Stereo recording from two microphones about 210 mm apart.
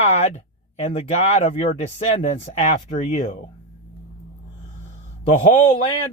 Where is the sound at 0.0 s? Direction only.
30° left (ahead or behind).